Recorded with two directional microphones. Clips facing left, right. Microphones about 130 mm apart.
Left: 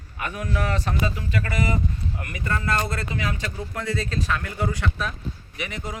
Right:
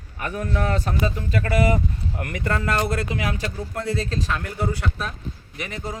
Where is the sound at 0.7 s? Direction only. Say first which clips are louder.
Right 2 dB; 45° right (ahead or behind).